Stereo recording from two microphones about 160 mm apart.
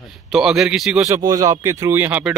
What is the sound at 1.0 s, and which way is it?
A man's voice, 20° right (ahead or behind).